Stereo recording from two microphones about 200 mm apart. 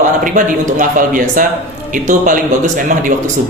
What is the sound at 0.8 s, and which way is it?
A man's voice, 40° right (ahead or behind).